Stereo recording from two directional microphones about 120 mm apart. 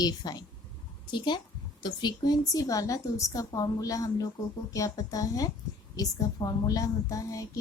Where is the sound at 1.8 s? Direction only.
40° left (ahead or behind).